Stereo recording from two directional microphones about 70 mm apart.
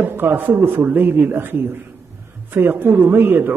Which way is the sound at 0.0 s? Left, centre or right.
Right.